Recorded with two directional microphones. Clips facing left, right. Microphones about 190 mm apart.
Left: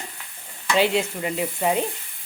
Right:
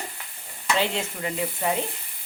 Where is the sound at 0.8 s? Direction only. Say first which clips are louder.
Left 9 dB; 20° left (ahead or behind).